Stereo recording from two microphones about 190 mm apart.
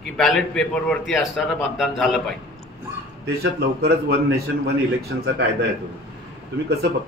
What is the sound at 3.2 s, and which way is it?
A man's voice, 60° right (ahead or behind).